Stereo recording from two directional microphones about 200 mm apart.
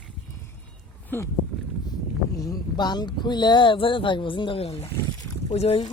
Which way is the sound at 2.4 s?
20° left (ahead or behind).